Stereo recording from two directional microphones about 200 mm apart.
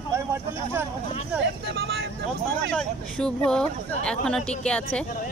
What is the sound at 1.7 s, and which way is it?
Vehicle, 55° right (ahead or behind).